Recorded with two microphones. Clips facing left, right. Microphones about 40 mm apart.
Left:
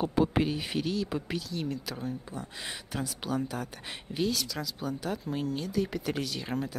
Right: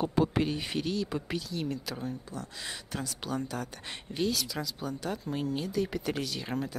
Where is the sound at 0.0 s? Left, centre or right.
Centre.